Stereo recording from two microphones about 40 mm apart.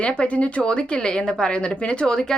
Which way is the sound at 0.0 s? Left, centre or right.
Left.